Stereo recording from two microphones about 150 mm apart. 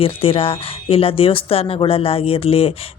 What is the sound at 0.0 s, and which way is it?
Speech, 40° left (ahead or behind).